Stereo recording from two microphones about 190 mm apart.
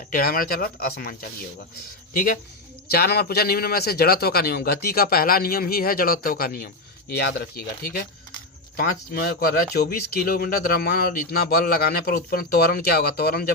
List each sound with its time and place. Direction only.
0.1 s speech: 50° left (ahead or behind)